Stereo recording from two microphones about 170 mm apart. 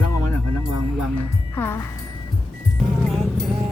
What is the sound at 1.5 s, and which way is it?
Speech, 10° left (ahead or behind).